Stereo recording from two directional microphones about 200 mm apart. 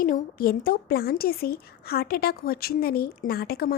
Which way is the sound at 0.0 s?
45° left (ahead or behind).